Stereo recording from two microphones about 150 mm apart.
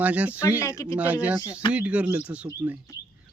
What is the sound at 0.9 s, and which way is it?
Speech, 10° right (ahead or behind).